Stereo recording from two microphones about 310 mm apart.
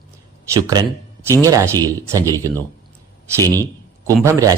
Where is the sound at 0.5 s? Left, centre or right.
Centre.